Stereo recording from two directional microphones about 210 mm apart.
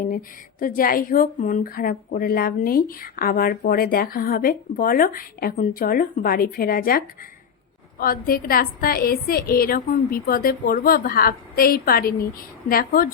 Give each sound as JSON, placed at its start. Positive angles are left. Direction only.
{"t": 0.0, "sound": "speech", "side_deg": 40}